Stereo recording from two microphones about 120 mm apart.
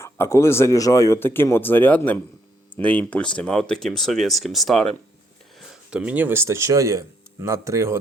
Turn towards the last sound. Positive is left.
turn(degrees=-25)  # may be behind; listen again after turning